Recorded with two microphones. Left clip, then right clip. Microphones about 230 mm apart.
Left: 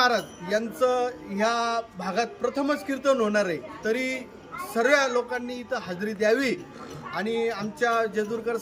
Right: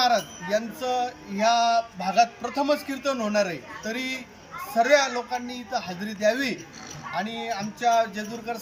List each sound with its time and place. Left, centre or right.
0.0 s male singing: centre